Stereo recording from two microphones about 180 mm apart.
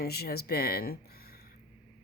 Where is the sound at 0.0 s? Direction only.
60° left (ahead or behind).